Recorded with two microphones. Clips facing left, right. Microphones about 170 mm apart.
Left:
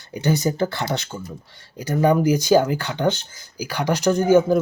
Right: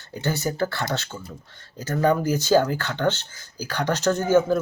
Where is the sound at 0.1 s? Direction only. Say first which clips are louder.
Left 5 dB; 15° left (ahead or behind).